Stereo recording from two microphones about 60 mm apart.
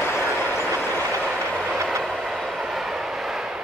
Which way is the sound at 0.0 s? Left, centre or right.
Left.